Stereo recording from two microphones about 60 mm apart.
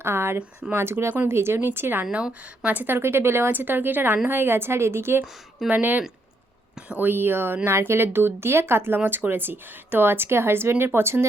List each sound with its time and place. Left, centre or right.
0.0 s a sound: right
0.7 s speech: right
5.6 s speech: right
7.0 s speech: right